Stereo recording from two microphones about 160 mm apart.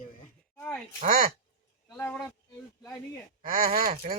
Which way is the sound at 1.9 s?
10° left (ahead or behind).